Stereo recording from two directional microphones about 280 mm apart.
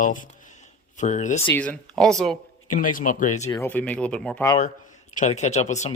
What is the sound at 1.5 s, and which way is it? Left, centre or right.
Speech, centre.